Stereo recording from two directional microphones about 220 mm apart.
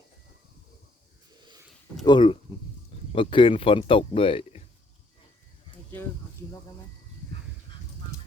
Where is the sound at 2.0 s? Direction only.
20° left (ahead or behind).